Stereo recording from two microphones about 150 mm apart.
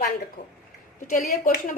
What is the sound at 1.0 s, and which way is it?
Speech, 65° left (ahead or behind).